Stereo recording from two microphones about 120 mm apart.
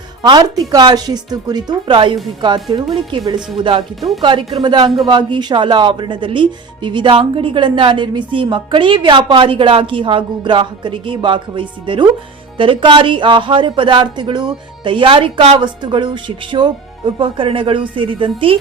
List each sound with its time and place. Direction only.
0.2 s a woman's voice: 35° right (ahead or behind)